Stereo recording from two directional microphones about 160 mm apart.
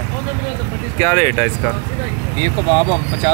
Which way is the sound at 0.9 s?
20° left (ahead or behind).